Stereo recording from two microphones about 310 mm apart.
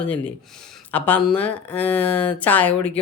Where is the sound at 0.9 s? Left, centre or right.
Centre.